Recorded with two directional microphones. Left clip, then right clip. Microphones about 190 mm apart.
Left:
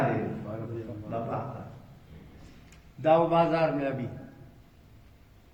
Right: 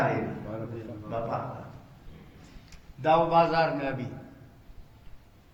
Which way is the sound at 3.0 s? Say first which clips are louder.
Right 1 dB; 35° right (ahead or behind).